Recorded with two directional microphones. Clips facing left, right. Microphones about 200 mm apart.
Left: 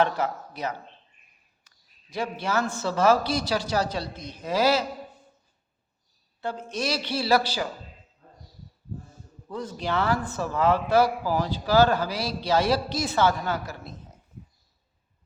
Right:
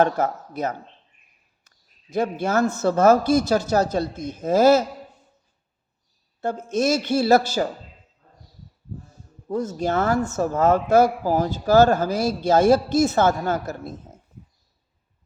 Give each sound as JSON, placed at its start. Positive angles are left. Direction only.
{"t": 0.0, "sound": "speech", "side_deg": -45}
{"t": 6.4, "sound": "speech", "side_deg": -45}
{"t": 9.5, "sound": "speech", "side_deg": -45}